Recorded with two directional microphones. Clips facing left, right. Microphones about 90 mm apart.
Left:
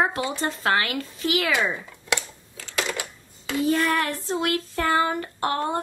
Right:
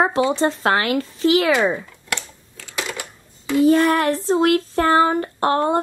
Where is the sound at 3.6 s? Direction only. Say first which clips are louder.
Right 7 dB; 30° right (ahead or behind).